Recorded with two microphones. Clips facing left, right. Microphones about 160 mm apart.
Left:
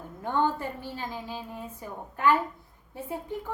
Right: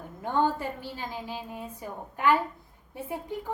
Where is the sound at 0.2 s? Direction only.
15° right (ahead or behind).